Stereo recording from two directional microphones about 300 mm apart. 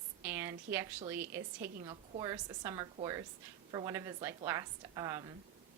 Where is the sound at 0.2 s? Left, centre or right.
Centre.